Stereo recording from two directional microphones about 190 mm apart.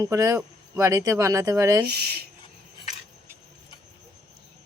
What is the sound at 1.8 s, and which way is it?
Speech, 55° right (ahead or behind).